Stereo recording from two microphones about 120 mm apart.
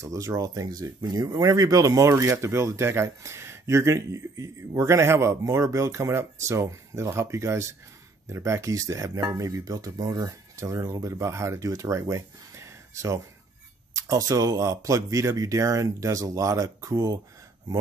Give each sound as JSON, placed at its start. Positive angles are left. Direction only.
{"t": 0.0, "sound": "speech", "side_deg": -30}